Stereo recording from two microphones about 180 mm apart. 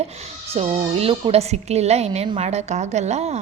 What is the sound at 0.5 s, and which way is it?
A woman's voice, 35° right (ahead or behind).